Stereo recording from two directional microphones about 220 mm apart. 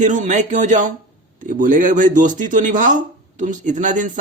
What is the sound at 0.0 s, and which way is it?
Speech, 35° right (ahead or behind).